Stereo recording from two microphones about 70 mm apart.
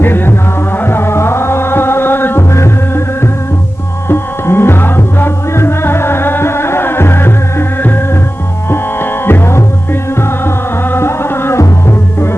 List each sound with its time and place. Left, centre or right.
0.0 s music: left